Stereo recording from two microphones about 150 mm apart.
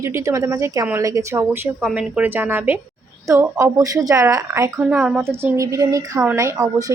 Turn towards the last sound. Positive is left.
turn(degrees=-20)  # may be behind; listen again after turning